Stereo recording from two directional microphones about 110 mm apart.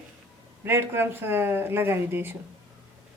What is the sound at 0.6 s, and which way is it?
Speech, 20° right (ahead or behind).